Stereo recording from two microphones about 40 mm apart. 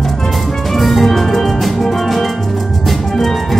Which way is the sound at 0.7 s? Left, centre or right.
Centre.